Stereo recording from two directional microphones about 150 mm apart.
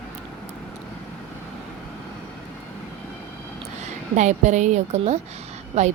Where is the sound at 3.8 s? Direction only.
50° right (ahead or behind).